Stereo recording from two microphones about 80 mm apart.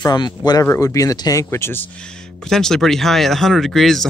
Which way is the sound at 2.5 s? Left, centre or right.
Centre.